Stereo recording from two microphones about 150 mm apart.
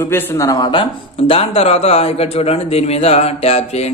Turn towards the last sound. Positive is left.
turn(degrees=45)  # may be behind; listen again after turning